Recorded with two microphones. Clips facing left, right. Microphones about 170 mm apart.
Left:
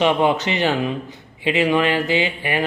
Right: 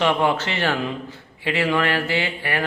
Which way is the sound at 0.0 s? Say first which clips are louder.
Left 3 dB; 20° left (ahead or behind).